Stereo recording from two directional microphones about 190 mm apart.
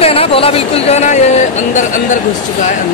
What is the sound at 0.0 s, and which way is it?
Speech, 30° left (ahead or behind).